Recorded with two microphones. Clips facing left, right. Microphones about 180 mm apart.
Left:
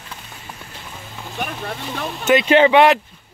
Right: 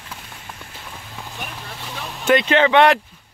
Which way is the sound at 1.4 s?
60° left (ahead or behind).